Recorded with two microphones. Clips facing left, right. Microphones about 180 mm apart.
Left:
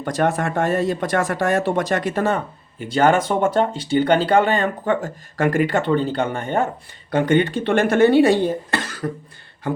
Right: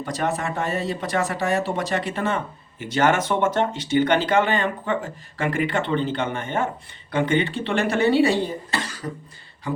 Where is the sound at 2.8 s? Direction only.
30° left (ahead or behind).